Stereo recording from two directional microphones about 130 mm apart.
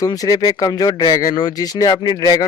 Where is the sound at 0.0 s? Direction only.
30° left (ahead or behind).